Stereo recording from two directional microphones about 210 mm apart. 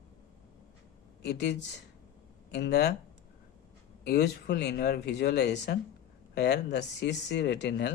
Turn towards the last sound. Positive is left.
turn(degrees=55)  # may be behind; listen again after turning